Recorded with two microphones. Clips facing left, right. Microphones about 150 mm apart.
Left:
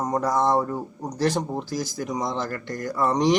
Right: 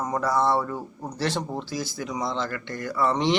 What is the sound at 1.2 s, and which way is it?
A man's voice, 40° left (ahead or behind).